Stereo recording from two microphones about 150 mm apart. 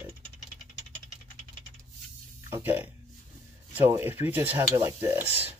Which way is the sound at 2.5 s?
15° right (ahead or behind).